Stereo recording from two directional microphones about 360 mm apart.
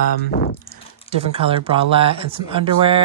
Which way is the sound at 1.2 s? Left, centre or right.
Centre.